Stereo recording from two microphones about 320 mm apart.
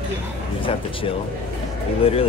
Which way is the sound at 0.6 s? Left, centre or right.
Centre.